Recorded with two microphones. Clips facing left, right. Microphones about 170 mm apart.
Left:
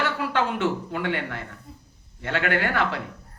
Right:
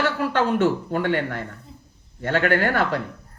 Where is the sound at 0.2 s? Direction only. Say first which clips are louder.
Right 4 dB; 40° right (ahead or behind).